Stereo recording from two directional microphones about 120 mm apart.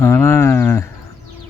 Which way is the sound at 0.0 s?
20° left (ahead or behind).